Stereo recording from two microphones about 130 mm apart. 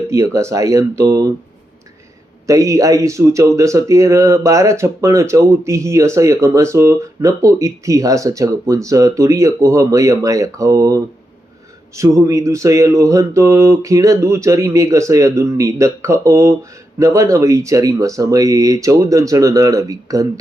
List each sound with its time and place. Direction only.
0.1 s speech: 20° right (ahead or behind)
2.5 s speech: 25° right (ahead or behind)